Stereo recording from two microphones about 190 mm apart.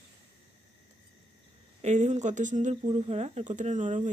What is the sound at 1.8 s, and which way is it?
Speech, 40° right (ahead or behind).